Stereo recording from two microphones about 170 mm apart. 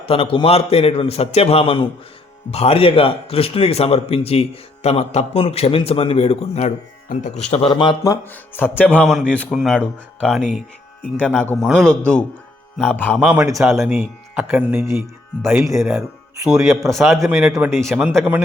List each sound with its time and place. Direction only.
0.0 s a man's voice: 35° left (ahead or behind)
7.5 s speech: 30° left (ahead or behind); by 10.6 s 5° right (ahead or behind)
11.2 s speech: 10° left (ahead or behind)
13.1 s speech: 5° right (ahead or behind)
17.2 s speech: 10° right (ahead or behind)
17.7 s speech: centre (ahead or behind)